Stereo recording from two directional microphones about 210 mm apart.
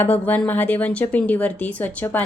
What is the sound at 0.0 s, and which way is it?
A woman's voice, 10° left (ahead or behind).